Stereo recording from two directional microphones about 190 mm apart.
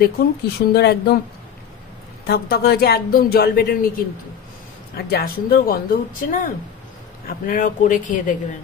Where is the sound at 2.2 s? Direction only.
55° left (ahead or behind).